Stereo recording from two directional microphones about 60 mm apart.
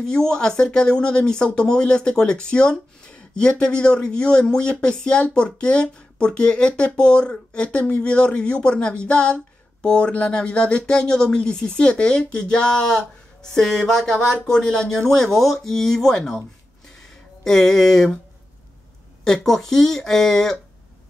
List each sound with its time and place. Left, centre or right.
0.0 s speech: centre
19.2 s speech: centre